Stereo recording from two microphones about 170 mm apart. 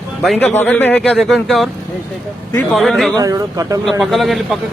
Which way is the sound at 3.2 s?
20° right (ahead or behind).